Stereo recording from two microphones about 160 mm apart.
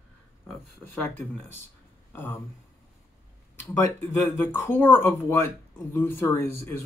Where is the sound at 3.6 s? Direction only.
15° left (ahead or behind).